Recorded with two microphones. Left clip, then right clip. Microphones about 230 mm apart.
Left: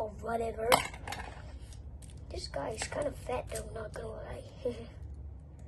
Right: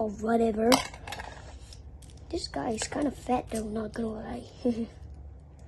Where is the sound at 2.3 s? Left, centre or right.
Right.